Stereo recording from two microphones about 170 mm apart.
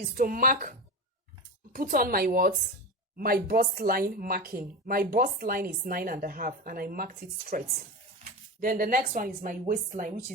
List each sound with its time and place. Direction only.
0.0 s speech: 55° right (ahead or behind)
8.6 s speech: 55° right (ahead or behind)